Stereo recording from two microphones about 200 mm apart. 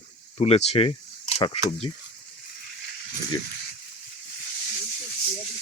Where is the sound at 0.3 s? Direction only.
30° left (ahead or behind).